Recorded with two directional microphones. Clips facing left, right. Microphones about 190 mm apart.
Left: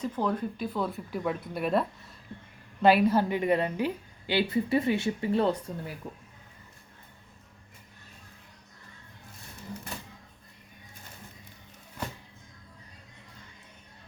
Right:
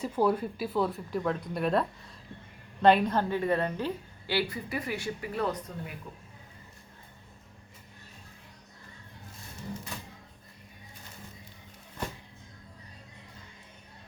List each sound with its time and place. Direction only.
0.0 s a woman's voice: 10° right (ahead or behind); by 5.9 s 30° left (ahead or behind)